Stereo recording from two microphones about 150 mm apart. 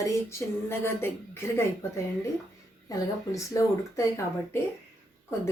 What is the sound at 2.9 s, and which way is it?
Speech, 20° left (ahead or behind).